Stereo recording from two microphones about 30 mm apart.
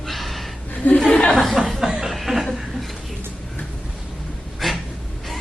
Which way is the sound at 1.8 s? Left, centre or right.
Centre.